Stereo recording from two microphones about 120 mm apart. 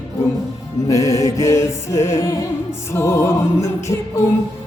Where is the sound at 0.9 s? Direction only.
30° left (ahead or behind).